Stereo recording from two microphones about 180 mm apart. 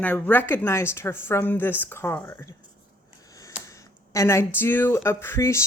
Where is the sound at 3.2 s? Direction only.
20° left (ahead or behind).